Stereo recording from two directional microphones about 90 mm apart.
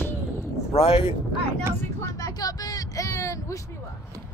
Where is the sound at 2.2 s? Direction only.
40° left (ahead or behind).